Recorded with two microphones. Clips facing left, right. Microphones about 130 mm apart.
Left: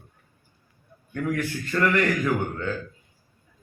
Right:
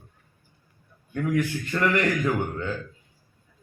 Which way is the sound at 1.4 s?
15° right (ahead or behind).